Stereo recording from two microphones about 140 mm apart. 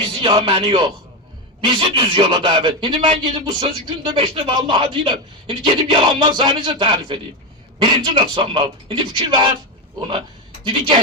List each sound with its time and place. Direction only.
0.0 s a man's voice: 40° right (ahead or behind)
10.6 s a woman's voice: 35° right (ahead or behind)